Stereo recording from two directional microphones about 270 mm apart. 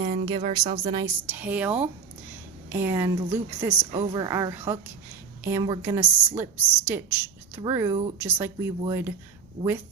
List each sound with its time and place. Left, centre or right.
0.0 s a sound: right
0.3 s speech: centre
0.9 s a woman's voice: centre